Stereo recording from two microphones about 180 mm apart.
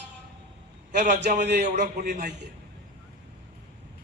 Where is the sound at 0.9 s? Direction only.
45° right (ahead or behind).